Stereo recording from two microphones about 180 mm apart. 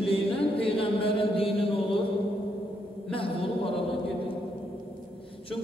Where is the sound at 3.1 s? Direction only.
30° left (ahead or behind).